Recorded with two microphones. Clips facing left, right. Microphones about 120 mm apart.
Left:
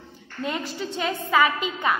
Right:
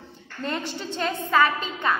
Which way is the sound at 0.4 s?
5° left (ahead or behind).